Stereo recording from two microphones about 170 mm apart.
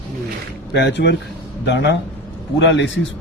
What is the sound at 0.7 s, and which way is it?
A man's voice, 90° left.